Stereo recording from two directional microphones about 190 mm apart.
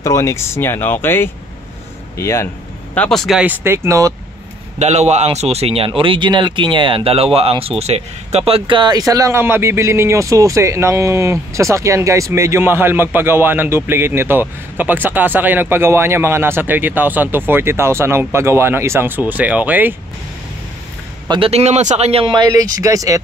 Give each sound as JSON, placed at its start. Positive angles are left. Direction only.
{"t": 0.0, "sound": "speech", "side_deg": 15}
{"t": 4.7, "sound": "a man's voice", "side_deg": -35}
{"t": 21.3, "sound": "speech", "side_deg": -30}